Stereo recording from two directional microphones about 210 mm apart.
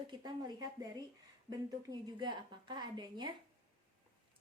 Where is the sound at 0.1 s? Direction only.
20° right (ahead or behind).